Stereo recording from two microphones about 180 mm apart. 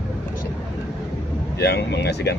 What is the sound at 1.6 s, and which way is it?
Speech, 65° left (ahead or behind).